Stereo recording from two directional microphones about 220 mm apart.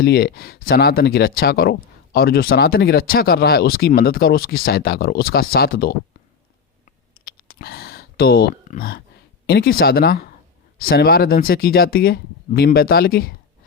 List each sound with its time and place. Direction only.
0.0 s speech: 45° left (ahead or behind)
6.8 s a sound: 45° left (ahead or behind)
9.5 s speech: 45° left (ahead or behind)